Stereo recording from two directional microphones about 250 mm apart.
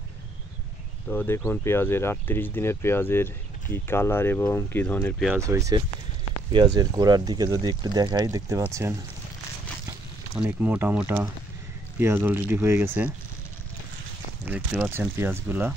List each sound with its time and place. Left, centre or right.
1.1 s speech: centre
5.3 s speech: centre
14.4 s speech: centre